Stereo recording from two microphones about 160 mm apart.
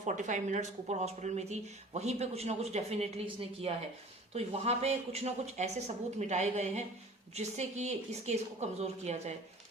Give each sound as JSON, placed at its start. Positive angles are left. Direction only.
{"t": 0.0, "sound": "speech", "side_deg": -50}